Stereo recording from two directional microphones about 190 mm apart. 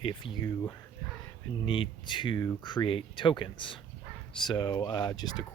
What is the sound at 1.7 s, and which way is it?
Speech, 25° left (ahead or behind).